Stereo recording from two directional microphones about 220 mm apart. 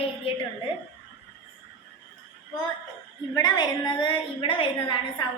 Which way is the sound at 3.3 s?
20° left (ahead or behind).